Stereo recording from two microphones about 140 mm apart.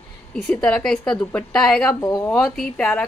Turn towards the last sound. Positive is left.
turn(degrees=10)  # may be behind; listen again after turning